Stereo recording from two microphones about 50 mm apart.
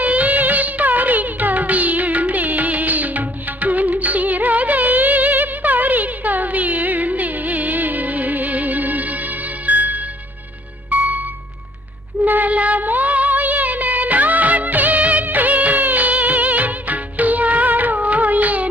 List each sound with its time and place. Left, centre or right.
0.0 s music: right
12.2 s music: right